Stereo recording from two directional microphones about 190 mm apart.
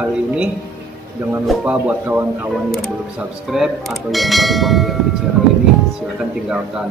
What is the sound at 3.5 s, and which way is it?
Speech, centre (ahead or behind).